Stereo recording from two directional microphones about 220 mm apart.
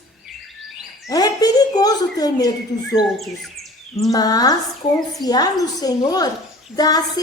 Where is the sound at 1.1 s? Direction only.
15° left (ahead or behind).